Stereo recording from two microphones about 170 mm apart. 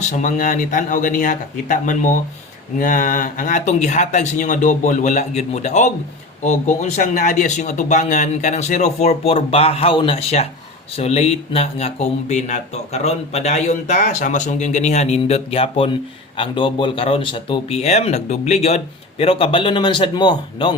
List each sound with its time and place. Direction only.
0.0 s a man's voice: 45° left (ahead or behind); by 20.7 s 25° left (ahead or behind)